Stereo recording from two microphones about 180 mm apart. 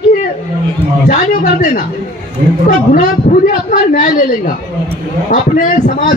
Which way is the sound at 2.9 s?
45° left (ahead or behind).